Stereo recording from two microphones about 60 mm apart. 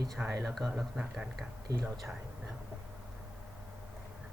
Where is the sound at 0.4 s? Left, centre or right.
Centre.